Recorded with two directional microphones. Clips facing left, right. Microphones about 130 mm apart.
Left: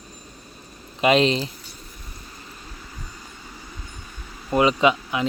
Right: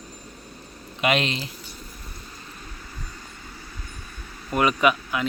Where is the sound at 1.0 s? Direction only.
30° left (ahead or behind).